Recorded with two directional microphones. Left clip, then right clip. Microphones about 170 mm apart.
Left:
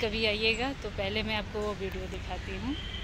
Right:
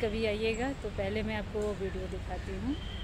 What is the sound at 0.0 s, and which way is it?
Speech, 15° right (ahead or behind).